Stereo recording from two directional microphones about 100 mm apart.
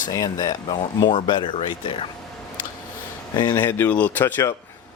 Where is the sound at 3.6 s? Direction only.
20° left (ahead or behind).